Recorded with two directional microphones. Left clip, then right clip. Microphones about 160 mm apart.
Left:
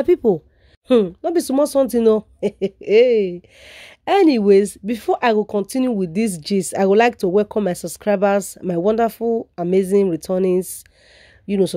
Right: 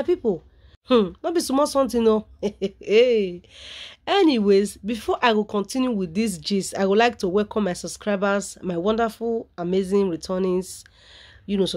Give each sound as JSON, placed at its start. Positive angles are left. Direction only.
{"t": 0.0, "sound": "speech", "side_deg": 55}
{"t": 0.8, "sound": "speech", "side_deg": 35}